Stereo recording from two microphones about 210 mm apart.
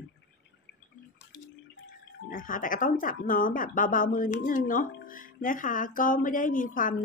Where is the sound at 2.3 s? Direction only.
40° left (ahead or behind).